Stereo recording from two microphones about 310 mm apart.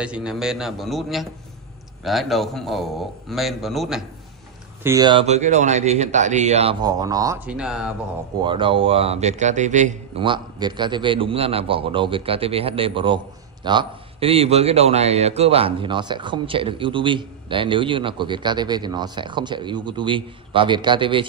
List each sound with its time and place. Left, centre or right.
0.0 s a man's voice: centre
4.8 s a man's voice: centre
8.4 s a man's voice: centre